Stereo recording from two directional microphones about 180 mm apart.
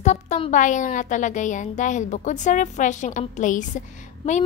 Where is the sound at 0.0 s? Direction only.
40° left (ahead or behind).